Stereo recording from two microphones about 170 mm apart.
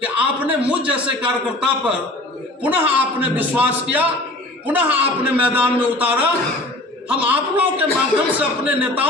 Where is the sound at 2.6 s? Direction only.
10° right (ahead or behind).